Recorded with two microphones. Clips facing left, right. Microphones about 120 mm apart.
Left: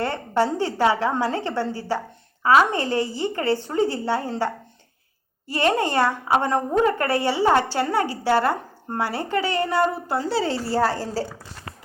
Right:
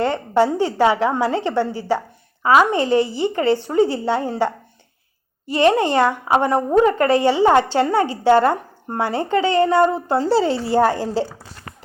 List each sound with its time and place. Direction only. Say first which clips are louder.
0.0 s a woman's voice: right 5 dB; 15° right (ahead or behind)
10.7 s a woman's voice: right 5 dB; 20° right (ahead or behind)